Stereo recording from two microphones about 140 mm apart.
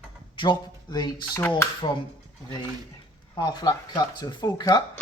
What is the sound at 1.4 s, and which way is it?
Speech, 15° left (ahead or behind).